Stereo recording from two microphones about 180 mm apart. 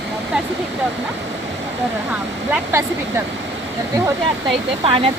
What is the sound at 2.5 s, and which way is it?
Speech, 10° right (ahead or behind).